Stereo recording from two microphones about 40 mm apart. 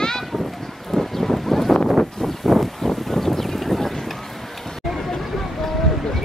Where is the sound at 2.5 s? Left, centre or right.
Centre.